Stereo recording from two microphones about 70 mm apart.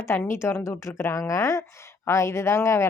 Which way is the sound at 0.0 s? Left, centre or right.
Left.